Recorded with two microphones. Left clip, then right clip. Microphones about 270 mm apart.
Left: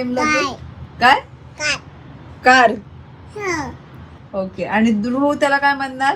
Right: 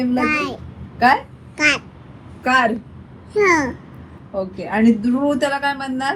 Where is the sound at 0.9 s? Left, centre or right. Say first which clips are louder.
Left 2 dB; left.